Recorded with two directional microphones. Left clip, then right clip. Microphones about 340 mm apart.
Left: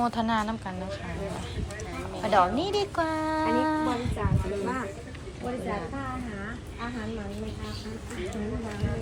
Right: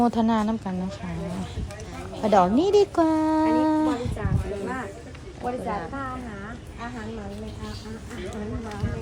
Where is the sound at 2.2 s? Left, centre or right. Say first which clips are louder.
Right 4 dB; centre.